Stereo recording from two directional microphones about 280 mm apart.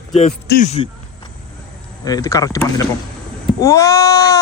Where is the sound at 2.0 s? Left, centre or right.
Centre.